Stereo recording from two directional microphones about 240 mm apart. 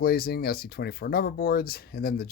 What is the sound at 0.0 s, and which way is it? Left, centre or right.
Speech, left.